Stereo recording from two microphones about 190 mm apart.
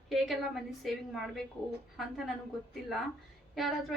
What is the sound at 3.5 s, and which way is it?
Speech, centre (ahead or behind).